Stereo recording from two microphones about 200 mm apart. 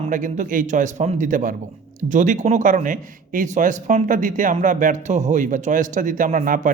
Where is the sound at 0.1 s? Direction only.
40° right (ahead or behind).